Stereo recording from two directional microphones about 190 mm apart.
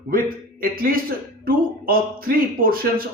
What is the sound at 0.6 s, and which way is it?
Speech, 50° right (ahead or behind).